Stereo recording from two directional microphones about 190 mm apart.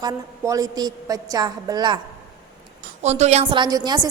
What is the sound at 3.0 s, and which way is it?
A woman's voice, 35° right (ahead or behind).